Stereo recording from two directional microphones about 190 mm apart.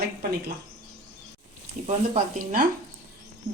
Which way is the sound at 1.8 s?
40° right (ahead or behind).